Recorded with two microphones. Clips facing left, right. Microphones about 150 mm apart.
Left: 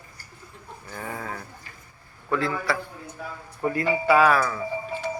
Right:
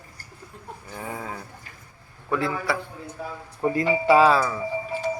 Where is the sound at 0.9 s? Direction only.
10° right (ahead or behind).